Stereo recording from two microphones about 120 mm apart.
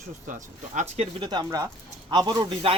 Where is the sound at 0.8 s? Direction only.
65° right (ahead or behind).